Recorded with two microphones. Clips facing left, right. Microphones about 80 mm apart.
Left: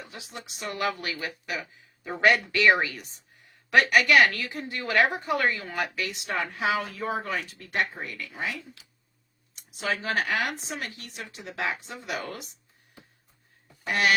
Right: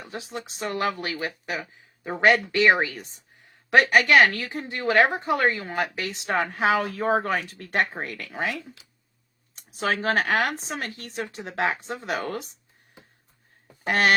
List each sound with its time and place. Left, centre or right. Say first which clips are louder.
0.0 s speech: right 6 dB; right
8.0 s speech: right 4 dB; right
9.8 s speech: right 4 dB; right
13.8 s speech: right 3 dB; right